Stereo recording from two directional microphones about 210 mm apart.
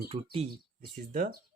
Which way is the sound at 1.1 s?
40° right (ahead or behind).